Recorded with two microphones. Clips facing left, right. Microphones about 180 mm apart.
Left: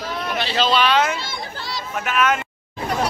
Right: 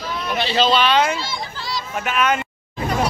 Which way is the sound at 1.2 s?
55° left (ahead or behind).